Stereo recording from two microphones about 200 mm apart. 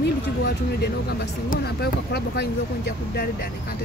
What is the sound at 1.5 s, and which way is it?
Speech, 50° left (ahead or behind).